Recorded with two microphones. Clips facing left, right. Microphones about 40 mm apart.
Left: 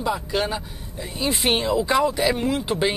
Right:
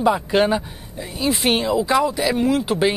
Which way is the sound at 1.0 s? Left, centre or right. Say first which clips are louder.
Right 3 dB; centre.